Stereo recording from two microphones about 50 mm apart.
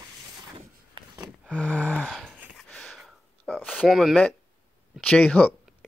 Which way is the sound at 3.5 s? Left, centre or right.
Left.